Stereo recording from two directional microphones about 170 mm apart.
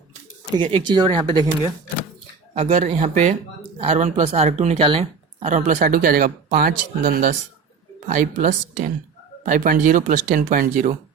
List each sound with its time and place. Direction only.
0.6 s speech: 30° right (ahead or behind)
2.6 s speech: 40° right (ahead or behind)